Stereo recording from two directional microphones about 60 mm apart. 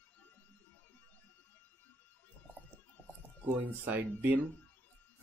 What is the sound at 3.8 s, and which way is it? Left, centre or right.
Speech, right.